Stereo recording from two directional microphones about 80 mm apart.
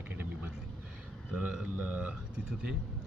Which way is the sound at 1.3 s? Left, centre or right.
Centre.